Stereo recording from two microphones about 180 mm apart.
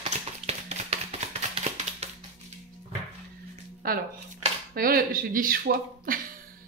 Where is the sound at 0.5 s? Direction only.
35° right (ahead or behind).